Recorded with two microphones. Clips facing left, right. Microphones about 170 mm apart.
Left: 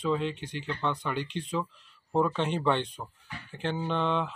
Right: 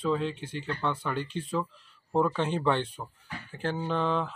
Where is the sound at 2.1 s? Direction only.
5° right (ahead or behind).